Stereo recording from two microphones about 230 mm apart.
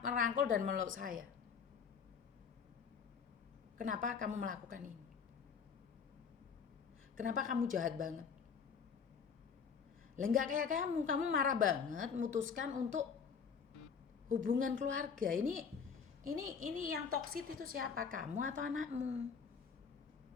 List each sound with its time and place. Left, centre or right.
0.0 s a woman's voice: right
3.8 s a woman's voice: right
7.2 s a woman's voice: right
10.3 s a woman's voice: right
14.3 s a woman's voice: right